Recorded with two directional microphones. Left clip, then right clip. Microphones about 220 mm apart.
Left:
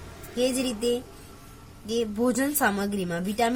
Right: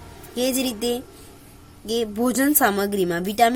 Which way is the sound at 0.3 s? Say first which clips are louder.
Right 3 dB; 45° right (ahead or behind).